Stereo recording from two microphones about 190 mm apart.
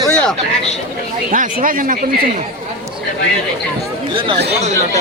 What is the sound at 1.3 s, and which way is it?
Speech, 45° right (ahead or behind).